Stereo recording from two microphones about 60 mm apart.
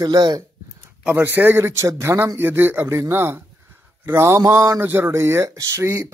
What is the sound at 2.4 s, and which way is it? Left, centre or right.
A man's voice, right.